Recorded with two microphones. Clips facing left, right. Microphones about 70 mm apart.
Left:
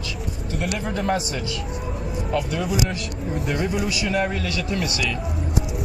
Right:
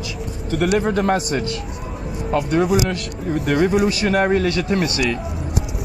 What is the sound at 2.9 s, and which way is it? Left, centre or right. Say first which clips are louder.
Speech: right 4 dB; right.